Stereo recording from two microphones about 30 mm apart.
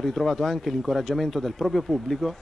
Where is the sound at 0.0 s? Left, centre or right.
Centre.